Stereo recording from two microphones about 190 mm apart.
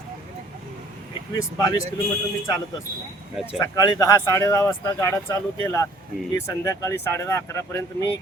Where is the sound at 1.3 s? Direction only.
20° left (ahead or behind).